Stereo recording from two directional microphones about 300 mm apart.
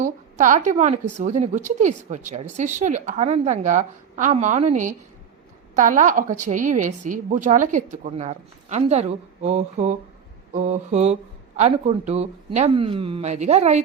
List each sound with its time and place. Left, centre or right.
0.0 s a woman's voice: right